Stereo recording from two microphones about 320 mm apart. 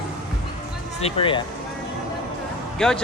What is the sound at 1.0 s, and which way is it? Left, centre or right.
Speech, centre.